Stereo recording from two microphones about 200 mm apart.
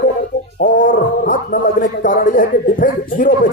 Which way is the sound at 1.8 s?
40° left (ahead or behind).